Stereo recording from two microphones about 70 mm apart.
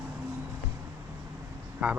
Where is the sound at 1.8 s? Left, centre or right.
Centre.